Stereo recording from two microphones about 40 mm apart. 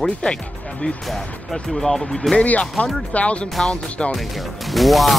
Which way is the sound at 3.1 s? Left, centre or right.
Left.